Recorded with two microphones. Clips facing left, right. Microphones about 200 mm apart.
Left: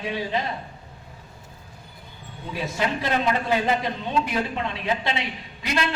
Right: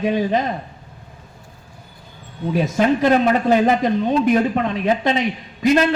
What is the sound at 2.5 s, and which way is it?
Speech, 45° right (ahead or behind).